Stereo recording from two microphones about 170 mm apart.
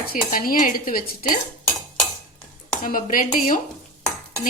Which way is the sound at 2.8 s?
55° left (ahead or behind).